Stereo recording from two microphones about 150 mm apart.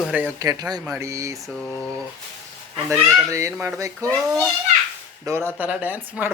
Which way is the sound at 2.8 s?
20° right (ahead or behind).